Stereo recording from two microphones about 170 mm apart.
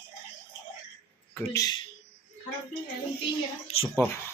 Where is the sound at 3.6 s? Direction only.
35° left (ahead or behind).